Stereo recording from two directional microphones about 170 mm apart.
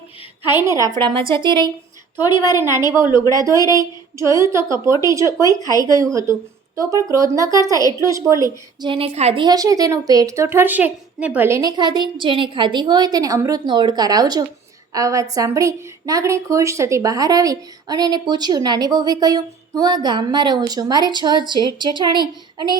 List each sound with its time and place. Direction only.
0.5 s a woman's voice: 15° right (ahead or behind)
2.2 s a woman's voice: 25° left (ahead or behind)
2.6 s a woman's voice: 15° right (ahead or behind)